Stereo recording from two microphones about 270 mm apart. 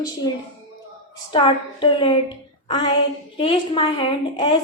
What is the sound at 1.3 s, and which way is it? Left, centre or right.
A woman's voice, centre.